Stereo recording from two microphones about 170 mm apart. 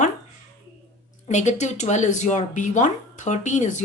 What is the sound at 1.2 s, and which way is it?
Speech, 45° left (ahead or behind).